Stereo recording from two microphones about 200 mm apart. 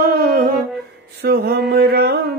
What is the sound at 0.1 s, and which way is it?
Humming, 50° right (ahead or behind).